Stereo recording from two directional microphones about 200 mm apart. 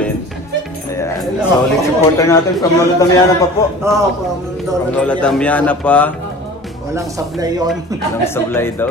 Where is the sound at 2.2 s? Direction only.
15° left (ahead or behind).